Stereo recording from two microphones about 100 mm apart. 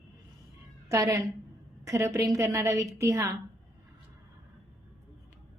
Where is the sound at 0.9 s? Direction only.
35° right (ahead or behind).